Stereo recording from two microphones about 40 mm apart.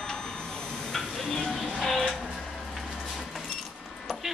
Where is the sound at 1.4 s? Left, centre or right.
Centre.